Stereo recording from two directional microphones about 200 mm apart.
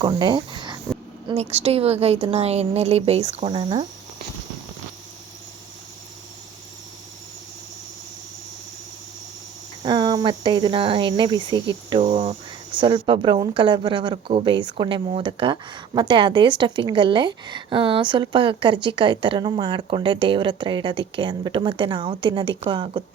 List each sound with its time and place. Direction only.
0.0 s a woman's voice: 25° right (ahead or behind)
9.8 s speech: 20° right (ahead or behind)